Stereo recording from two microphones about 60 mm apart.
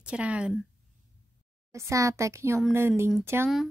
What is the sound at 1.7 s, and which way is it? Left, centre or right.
A child's voice, right.